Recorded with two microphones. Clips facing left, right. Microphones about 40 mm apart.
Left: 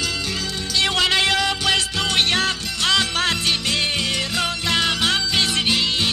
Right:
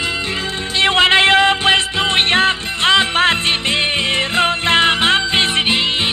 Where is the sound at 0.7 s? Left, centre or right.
Right.